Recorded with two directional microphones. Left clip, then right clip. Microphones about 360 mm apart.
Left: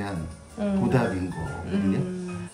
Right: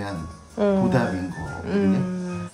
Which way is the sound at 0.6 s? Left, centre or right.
Centre.